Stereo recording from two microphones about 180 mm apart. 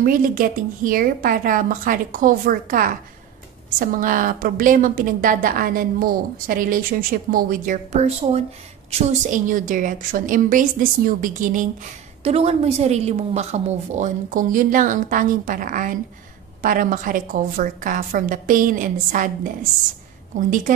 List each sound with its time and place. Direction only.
0.0 s a woman's voice: 50° right (ahead or behind)
12.2 s a woman's voice: 35° right (ahead or behind)